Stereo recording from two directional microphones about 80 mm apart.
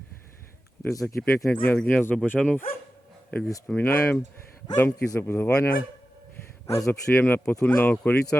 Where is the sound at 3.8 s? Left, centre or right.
Left.